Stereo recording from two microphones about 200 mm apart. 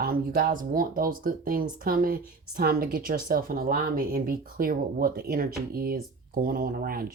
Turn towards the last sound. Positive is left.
turn(degrees=-50)  # may be behind; listen again after turning